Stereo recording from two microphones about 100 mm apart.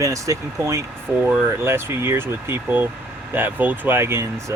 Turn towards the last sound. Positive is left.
turn(degrees=-25)  # may be behind; listen again after turning